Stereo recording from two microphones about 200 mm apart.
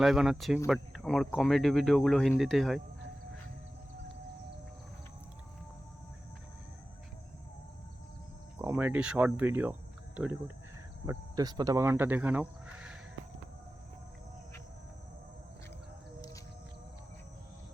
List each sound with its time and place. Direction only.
0.0 s speech: centre (ahead or behind)
8.5 s speech: 10° right (ahead or behind)
11.0 s speech: 15° right (ahead or behind)